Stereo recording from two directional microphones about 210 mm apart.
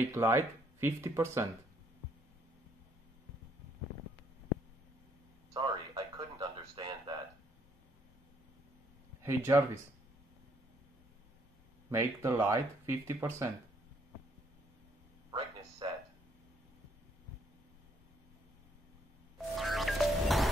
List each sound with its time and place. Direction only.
0.1 s speech: 10° right (ahead or behind)
5.5 s a sound: 20° right (ahead or behind)
9.2 s speech: 10° right (ahead or behind)
11.9 s speech: 15° right (ahead or behind)
15.8 s a sound: 25° right (ahead or behind)
19.5 s music: centre (ahead or behind)